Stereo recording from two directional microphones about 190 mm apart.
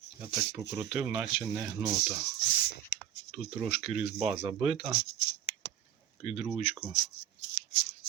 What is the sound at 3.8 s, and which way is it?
Speech, 5° right (ahead or behind).